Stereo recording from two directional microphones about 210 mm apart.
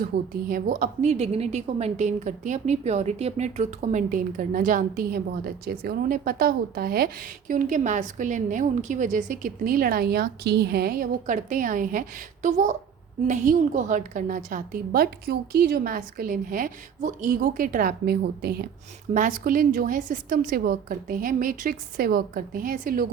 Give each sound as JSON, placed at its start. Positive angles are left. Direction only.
{"t": 0.0, "sound": "a woman's voice", "side_deg": -45}